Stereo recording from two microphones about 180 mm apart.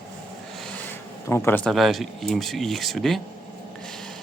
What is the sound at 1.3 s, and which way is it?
Speech, 15° left (ahead or behind).